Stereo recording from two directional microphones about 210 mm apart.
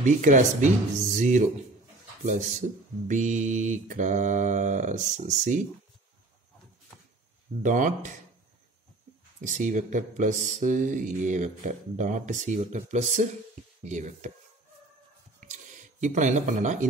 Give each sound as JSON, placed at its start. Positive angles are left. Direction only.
{"t": 0.0, "sound": "speech", "side_deg": -35}
{"t": 7.6, "sound": "speech", "side_deg": -35}
{"t": 9.4, "sound": "speech", "side_deg": -35}
{"t": 15.4, "sound": "a sound", "side_deg": -35}